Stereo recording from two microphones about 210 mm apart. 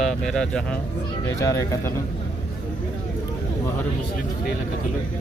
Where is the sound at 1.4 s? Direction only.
15° left (ahead or behind).